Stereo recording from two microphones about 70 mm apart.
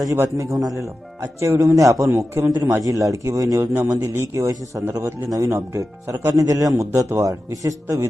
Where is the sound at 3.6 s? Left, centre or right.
Right.